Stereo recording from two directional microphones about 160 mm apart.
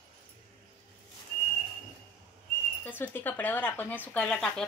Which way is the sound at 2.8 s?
10° left (ahead or behind).